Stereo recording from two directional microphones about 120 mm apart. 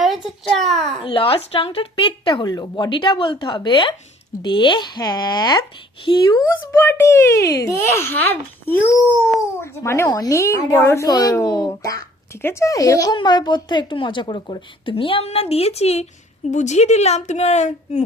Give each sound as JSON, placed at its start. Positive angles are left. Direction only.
{"t": 0.0, "sound": "a sound", "side_deg": 0}
{"t": 0.7, "sound": "a child's voice", "side_deg": 5}
{"t": 1.0, "sound": "a woman's voice", "side_deg": 50}
{"t": 6.5, "sound": "a child's voice", "side_deg": 20}
{"t": 16.5, "sound": "a woman's voice", "side_deg": 80}